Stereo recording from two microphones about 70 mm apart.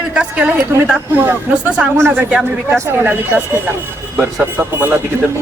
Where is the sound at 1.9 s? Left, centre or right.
Right.